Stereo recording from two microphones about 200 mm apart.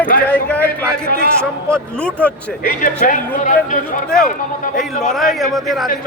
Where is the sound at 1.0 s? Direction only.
50° right (ahead or behind).